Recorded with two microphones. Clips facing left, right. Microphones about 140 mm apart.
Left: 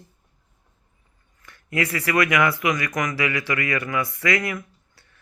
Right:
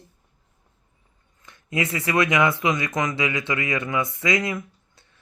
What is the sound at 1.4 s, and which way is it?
Speech, 20° right (ahead or behind).